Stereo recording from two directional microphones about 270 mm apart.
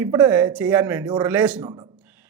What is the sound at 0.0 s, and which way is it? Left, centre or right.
Speech, centre.